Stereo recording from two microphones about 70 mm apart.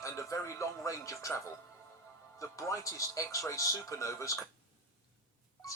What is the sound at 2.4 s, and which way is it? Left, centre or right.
Speech, left.